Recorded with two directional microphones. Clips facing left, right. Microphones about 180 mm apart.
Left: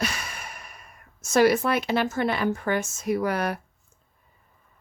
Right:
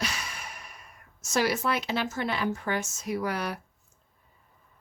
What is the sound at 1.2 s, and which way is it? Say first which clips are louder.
Speech: left 7 dB; 55° left (ahead or behind).